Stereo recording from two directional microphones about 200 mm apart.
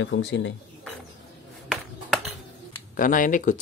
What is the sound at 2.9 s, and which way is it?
Speech, 40° left (ahead or behind).